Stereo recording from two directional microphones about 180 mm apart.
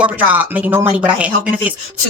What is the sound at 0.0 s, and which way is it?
Speech, 10° right (ahead or behind).